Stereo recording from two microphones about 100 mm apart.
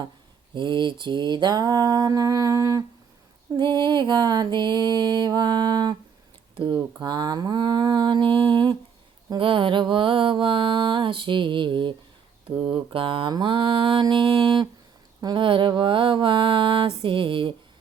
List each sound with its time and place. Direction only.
0.5 s mantra: 50° right (ahead or behind); by 2.8 s 35° right (ahead or behind)
3.6 s music: 50° right (ahead or behind)
9.4 s mantra: 60° right (ahead or behind)